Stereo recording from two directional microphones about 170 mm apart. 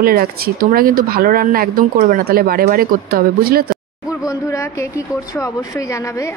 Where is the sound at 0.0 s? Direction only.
60° right (ahead or behind).